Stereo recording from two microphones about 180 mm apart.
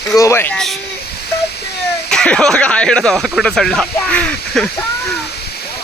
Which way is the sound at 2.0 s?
5° left (ahead or behind).